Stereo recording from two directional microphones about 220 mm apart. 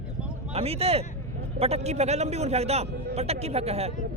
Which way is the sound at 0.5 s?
25° right (ahead or behind).